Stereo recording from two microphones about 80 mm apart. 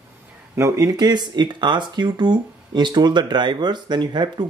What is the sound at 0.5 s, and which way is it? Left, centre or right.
Speech, right.